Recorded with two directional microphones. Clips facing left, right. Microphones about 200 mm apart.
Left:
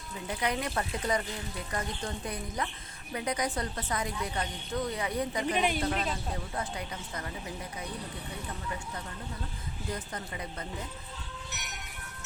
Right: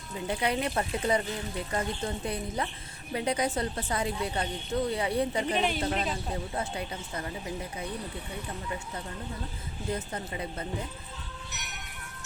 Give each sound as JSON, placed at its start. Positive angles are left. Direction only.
{"t": 0.3, "sound": "speech", "side_deg": -30}
{"t": 5.5, "sound": "speech", "side_deg": 10}
{"t": 6.5, "sound": "speech", "side_deg": -25}
{"t": 9.9, "sound": "speech", "side_deg": -25}